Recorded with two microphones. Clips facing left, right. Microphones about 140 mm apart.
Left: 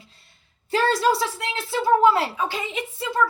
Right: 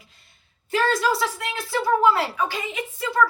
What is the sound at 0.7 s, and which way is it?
A woman's voice, 30° left (ahead or behind).